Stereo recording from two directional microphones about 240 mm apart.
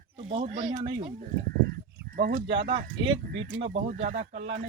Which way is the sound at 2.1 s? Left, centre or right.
Right.